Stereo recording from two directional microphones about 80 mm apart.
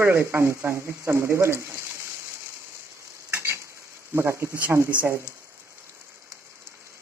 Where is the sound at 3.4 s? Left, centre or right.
Right.